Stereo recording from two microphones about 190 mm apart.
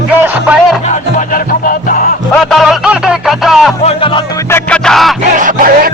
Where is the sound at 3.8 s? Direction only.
30° left (ahead or behind).